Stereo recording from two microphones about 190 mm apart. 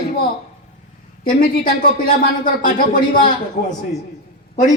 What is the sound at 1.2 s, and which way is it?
A man's voice, 50° left (ahead or behind).